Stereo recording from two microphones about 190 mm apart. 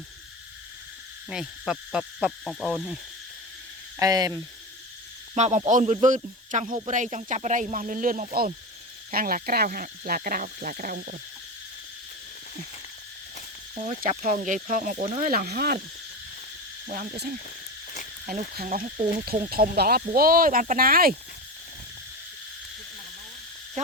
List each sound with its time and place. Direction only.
1.3 s speech: 5° right (ahead or behind)
4.0 s speech: 20° right (ahead or behind)
5.3 s speech: 35° right (ahead or behind); by 11.2 s 50° right (ahead or behind)
13.7 s speech: 40° right (ahead or behind)
16.8 s speech: 45° right (ahead or behind)
23.8 s frog: 40° right (ahead or behind)